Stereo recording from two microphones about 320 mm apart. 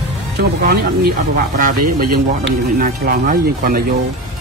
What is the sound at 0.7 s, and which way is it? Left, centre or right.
Speech, right.